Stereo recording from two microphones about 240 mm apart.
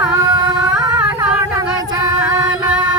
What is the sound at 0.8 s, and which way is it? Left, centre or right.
Singing, centre.